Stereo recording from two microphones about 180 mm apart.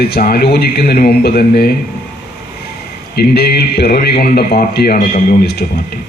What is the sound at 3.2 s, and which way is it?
A man's voice, 65° left (ahead or behind).